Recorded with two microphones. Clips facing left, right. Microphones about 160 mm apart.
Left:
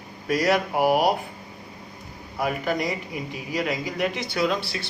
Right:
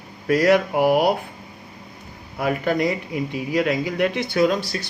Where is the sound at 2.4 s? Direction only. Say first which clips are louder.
Right 5 dB; 60° right (ahead or behind); by 4.8 s 45° right (ahead or behind).